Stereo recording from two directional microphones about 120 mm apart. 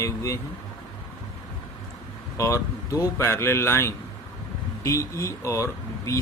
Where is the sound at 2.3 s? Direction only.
25° left (ahead or behind).